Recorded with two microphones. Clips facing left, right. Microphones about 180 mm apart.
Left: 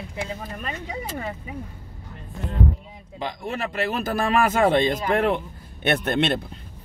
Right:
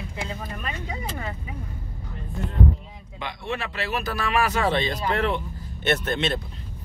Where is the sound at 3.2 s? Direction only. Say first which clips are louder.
Left 2 dB; 40° left (ahead or behind); by 6.3 s 55° left (ahead or behind).